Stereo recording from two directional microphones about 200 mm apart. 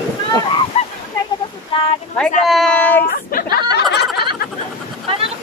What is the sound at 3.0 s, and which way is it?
Speech, 45° left (ahead or behind).